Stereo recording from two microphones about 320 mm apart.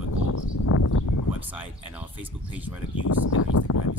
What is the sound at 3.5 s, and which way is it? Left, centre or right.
Speech, left.